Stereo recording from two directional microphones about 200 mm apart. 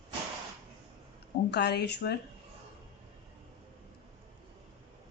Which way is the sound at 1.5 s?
55° left (ahead or behind).